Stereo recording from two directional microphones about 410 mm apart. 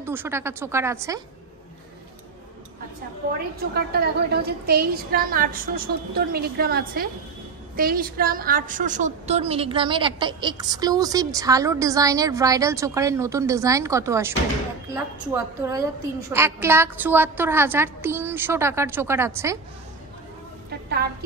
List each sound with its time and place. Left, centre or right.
0.0 s a woman's voice: centre
3.7 s a woman's voice: right; by 14.3 s centre
15.3 s a woman's voice: centre